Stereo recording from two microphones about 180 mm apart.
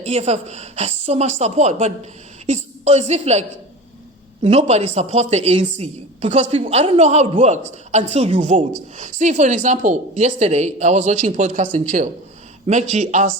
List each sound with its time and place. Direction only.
0.0 s a woman's voice: 35° right (ahead or behind)
4.4 s a woman's voice: 35° right (ahead or behind)